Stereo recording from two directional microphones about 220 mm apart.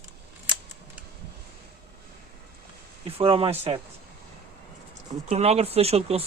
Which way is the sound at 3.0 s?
25° right (ahead or behind).